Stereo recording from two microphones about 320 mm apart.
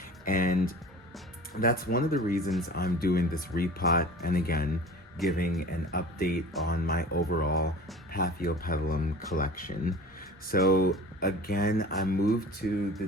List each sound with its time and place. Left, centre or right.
0.3 s speech: left